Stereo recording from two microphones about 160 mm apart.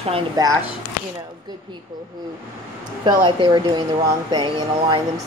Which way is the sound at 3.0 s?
30° right (ahead or behind).